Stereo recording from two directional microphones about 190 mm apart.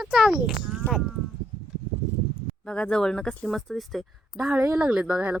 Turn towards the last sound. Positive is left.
turn(degrees=-5)  # may be behind; listen again after turning